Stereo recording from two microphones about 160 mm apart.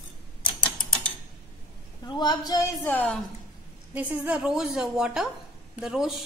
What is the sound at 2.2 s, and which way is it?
Speech, 25° left (ahead or behind).